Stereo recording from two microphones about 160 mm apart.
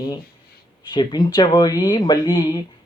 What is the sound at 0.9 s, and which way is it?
Speech, 30° left (ahead or behind).